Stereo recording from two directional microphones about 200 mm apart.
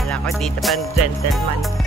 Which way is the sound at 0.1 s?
Centre (ahead or behind).